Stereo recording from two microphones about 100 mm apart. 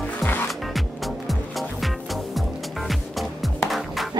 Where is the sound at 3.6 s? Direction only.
Centre (ahead or behind).